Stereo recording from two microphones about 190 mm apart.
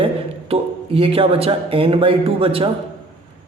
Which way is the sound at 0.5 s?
30° right (ahead or behind).